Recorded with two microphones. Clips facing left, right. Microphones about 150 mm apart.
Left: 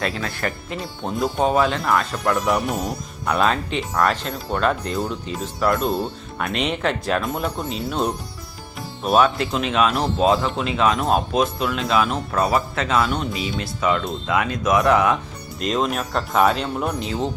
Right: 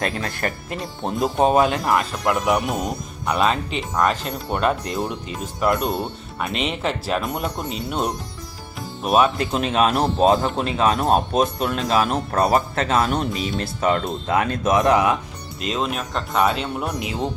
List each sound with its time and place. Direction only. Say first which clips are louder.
0.0 s speech: even; 40° right (ahead or behind)
1.2 s speech: right 2 dB; 20° right (ahead or behind); by 4.3 s 5° right (ahead or behind)
4.3 s speech: even; 15° right (ahead or behind)
6.4 s speech: left 1 dB; centre (ahead or behind)
9.0 s speech: even; 10° right (ahead or behind)
9.6 s speech: right 1 dB; 35° right (ahead or behind)
10.3 s speech: right 1 dB; 45° right (ahead or behind)
14.7 s speech: even; 25° right (ahead or behind)
15.6 s speech: left 3 dB; centre (ahead or behind)